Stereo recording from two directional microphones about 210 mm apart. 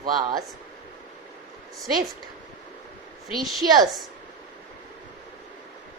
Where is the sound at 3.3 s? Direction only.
Centre (ahead or behind).